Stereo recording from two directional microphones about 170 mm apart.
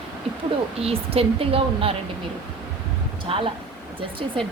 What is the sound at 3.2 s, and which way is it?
Speech, 30° right (ahead or behind).